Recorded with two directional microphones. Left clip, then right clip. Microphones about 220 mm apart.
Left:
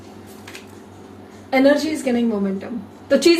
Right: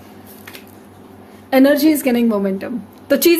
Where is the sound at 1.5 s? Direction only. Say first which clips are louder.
Right 3 dB; 55° right (ahead or behind).